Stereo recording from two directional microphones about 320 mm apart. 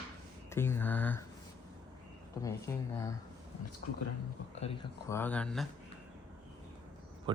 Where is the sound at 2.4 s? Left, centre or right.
Centre.